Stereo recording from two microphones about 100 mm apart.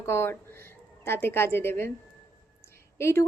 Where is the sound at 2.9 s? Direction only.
25° left (ahead or behind).